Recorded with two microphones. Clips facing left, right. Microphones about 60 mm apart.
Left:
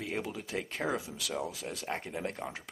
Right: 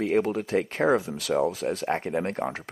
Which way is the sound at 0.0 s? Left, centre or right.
Right.